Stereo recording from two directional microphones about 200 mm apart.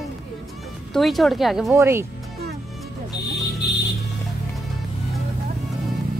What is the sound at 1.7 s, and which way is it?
Speech, 15° right (ahead or behind).